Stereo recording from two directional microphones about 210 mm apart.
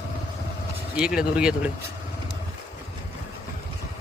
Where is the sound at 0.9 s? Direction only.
5° right (ahead or behind).